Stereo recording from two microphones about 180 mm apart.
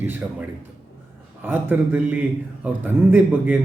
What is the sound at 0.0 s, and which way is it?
A man's voice, 10° right (ahead or behind).